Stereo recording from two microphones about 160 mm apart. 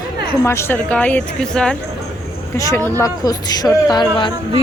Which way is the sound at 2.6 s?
20° left (ahead or behind).